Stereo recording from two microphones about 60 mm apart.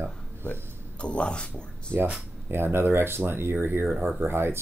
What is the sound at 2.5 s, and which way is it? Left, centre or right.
Speech, right.